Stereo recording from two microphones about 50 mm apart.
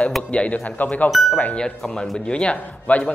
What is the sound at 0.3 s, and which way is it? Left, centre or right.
A man's voice, left.